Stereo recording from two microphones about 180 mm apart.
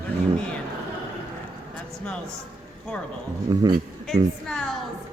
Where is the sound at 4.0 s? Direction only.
Centre (ahead or behind).